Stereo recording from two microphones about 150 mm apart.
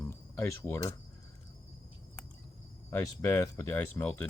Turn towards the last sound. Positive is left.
turn(degrees=15)  # may be behind; listen again after turning